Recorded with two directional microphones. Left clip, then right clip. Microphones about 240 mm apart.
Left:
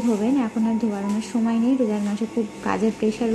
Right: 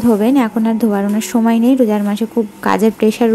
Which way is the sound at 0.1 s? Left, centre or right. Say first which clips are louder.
Right 10 dB; right.